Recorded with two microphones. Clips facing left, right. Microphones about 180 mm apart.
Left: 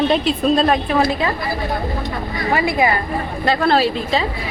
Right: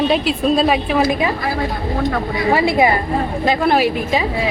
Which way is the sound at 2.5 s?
25° right (ahead or behind).